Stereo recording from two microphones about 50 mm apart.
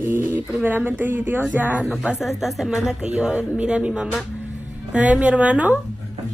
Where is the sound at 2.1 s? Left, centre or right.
Centre.